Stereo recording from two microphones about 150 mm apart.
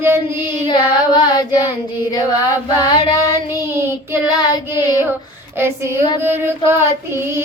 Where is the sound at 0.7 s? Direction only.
30° left (ahead or behind).